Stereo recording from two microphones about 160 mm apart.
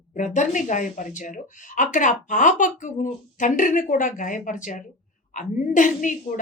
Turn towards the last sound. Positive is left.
turn(degrees=55)  # may be behind; listen again after turning